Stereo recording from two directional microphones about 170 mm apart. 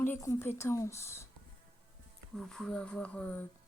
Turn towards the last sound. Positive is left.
turn(degrees=10)  # may be behind; listen again after turning